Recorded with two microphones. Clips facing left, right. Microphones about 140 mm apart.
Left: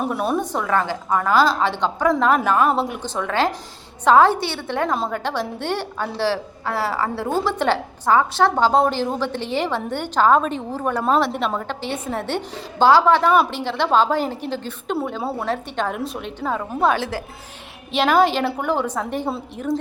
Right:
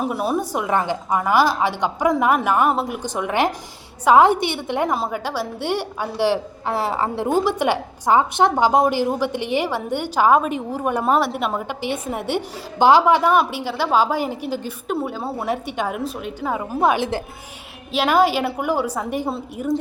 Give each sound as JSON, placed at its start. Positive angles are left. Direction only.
{"t": 0.0, "sound": "a woman's voice", "side_deg": 0}
{"t": 3.2, "sound": "a woman's voice", "side_deg": -15}
{"t": 17.9, "sound": "a woman's voice", "side_deg": -5}